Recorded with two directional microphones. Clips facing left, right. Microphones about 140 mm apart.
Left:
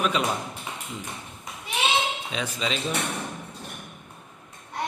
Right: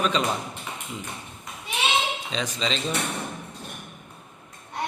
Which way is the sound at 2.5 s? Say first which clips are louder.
Even; 10° left (ahead or behind).